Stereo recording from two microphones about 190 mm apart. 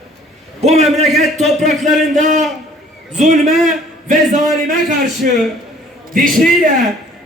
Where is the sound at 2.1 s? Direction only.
40° right (ahead or behind).